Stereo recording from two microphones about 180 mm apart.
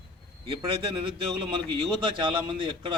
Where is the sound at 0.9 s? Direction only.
30° right (ahead or behind).